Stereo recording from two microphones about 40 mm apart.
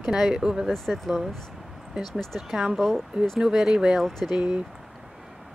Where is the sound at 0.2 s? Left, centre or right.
Centre.